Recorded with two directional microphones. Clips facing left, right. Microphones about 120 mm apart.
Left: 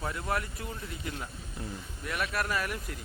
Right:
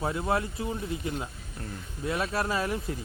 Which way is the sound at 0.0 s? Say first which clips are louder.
Right 5 dB; 25° right (ahead or behind).